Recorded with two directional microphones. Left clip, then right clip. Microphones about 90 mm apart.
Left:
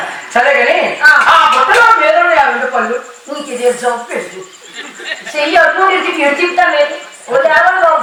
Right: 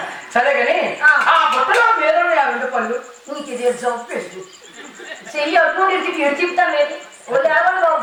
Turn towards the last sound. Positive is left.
turn(degrees=-20)  # may be behind; listen again after turning